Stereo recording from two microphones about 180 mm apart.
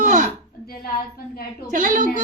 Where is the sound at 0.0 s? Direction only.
45° right (ahead or behind).